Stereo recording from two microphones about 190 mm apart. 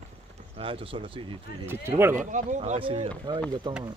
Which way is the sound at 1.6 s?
10° right (ahead or behind).